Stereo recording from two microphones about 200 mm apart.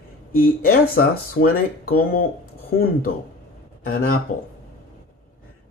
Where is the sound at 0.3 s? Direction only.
50° left (ahead or behind).